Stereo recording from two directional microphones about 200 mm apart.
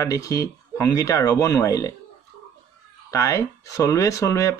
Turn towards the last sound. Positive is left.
turn(degrees=15)  # may be behind; listen again after turning